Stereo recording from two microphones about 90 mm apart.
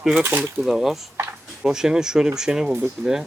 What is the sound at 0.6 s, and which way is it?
A man's voice, 5° right (ahead or behind).